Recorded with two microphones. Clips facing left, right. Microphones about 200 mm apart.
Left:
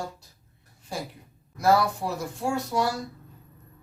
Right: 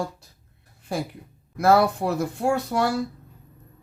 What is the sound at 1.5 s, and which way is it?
Speech, 60° right (ahead or behind).